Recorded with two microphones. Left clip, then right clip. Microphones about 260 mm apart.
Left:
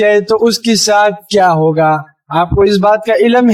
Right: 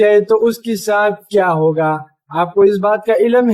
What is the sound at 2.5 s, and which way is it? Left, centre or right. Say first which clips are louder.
Speech: left 2 dB; left.